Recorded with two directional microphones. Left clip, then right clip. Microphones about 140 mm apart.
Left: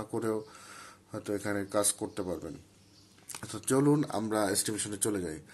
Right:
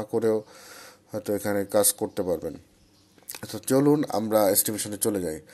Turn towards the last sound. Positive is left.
turn(degrees=-30)  # may be behind; listen again after turning